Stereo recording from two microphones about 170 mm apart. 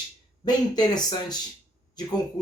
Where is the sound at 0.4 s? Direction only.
25° left (ahead or behind).